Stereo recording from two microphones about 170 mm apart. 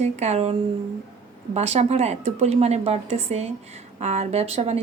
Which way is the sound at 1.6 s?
40° right (ahead or behind).